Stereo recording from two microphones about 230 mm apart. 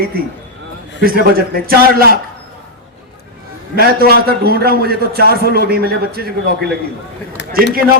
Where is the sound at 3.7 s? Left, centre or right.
Right.